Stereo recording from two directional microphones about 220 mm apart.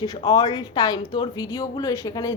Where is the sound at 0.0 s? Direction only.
20° left (ahead or behind).